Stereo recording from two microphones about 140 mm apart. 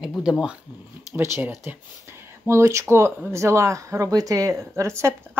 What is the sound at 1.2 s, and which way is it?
Speech, 15° right (ahead or behind).